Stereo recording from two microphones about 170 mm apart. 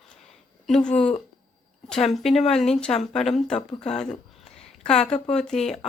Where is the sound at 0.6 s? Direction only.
5° left (ahead or behind).